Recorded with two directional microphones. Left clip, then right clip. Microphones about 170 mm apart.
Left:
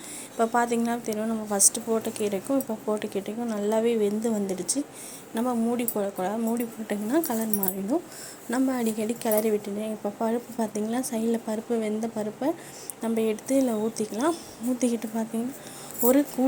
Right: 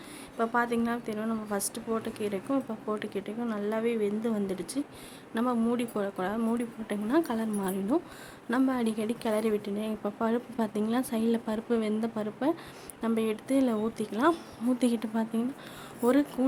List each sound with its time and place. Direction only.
0.3 s speech: 15° left (ahead or behind)